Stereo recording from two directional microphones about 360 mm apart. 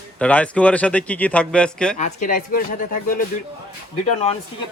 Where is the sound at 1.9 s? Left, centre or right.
Left.